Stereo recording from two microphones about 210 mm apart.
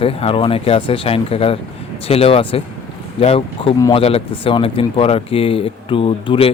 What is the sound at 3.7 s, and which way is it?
Speech, 15° left (ahead or behind).